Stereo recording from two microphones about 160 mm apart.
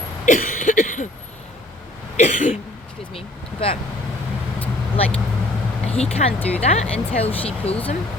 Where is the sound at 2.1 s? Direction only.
50° left (ahead or behind).